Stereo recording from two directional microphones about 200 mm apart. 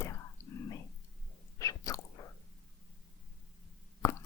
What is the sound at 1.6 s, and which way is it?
Biting, 15° left (ahead or behind).